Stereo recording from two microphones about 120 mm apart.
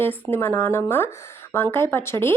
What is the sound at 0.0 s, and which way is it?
A woman's voice, 20° left (ahead or behind).